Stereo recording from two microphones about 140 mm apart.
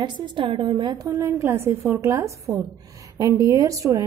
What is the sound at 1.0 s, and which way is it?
A woman's voice, 20° right (ahead or behind).